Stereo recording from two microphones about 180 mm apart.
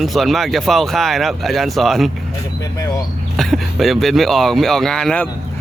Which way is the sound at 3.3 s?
Centre (ahead or behind).